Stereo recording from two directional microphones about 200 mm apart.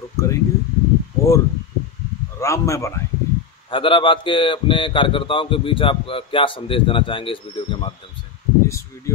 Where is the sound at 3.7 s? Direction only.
25° left (ahead or behind).